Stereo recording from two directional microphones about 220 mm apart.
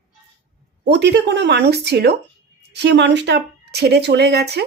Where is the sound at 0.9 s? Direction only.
50° right (ahead or behind).